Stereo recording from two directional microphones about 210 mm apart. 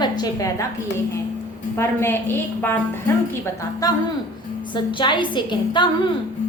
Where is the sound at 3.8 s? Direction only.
15° left (ahead or behind).